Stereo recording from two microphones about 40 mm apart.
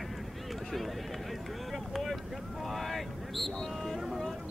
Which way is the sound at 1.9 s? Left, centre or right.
Centre.